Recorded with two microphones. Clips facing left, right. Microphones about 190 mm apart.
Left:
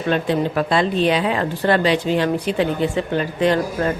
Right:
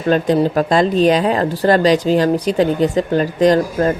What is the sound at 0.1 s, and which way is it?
Speech, 40° right (ahead or behind).